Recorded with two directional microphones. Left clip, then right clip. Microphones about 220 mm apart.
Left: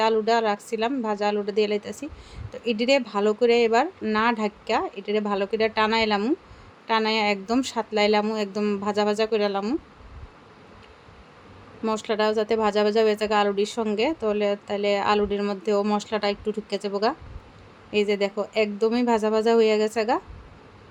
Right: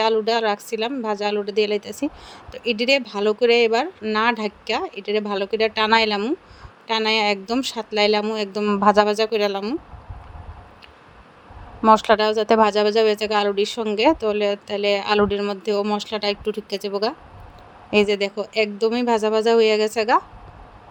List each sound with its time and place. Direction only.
0.0 s speech: 25° right (ahead or behind)
11.8 s speech: 25° right (ahead or behind)